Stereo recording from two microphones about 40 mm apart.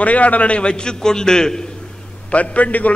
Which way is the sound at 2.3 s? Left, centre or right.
Left.